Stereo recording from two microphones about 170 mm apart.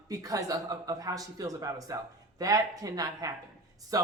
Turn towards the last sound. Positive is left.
turn(degrees=-20)  # may be behind; listen again after turning